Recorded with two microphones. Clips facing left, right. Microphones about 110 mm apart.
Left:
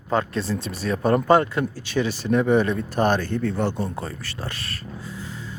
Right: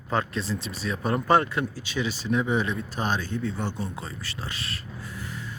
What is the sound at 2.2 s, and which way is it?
Speech, 60° left (ahead or behind).